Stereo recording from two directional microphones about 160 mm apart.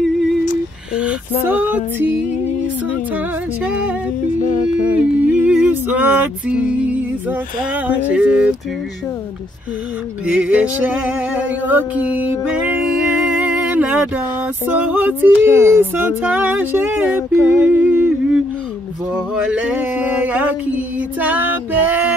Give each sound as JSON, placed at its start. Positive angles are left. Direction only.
{"t": 1.4, "sound": "music", "side_deg": -10}
{"t": 3.6, "sound": "music", "side_deg": -10}
{"t": 4.4, "sound": "a sound", "side_deg": 50}
{"t": 5.2, "sound": "music", "side_deg": -5}
{"t": 10.2, "sound": "music", "side_deg": -5}
{"t": 13.4, "sound": "a sound", "side_deg": -10}
{"t": 14.7, "sound": "music", "side_deg": -10}